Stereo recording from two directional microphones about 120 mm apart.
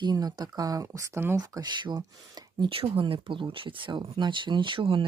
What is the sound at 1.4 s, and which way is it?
Speech, 35° right (ahead or behind).